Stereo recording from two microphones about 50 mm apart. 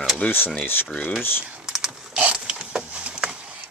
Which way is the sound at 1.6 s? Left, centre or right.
Centre.